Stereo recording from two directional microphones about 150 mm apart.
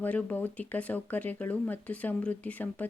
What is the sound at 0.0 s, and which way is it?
Speech, 10° left (ahead or behind).